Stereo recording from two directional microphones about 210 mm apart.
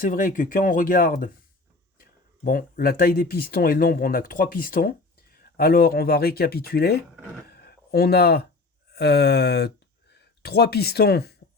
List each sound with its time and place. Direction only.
0.0 s speech: 40° left (ahead or behind)
2.4 s speech: 45° left (ahead or behind)
7.4 s a sound: 50° left (ahead or behind)
8.9 s speech: 50° left (ahead or behind)